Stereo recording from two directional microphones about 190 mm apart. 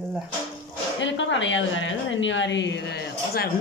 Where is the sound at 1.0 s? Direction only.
75° left (ahead or behind).